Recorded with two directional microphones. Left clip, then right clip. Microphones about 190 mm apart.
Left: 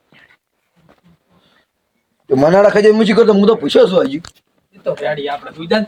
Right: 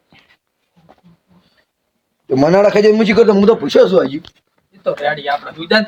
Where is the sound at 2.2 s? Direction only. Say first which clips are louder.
Left 1 dB; 10° right (ahead or behind).